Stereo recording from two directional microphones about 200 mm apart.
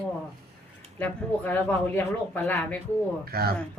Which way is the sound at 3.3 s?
50° right (ahead or behind).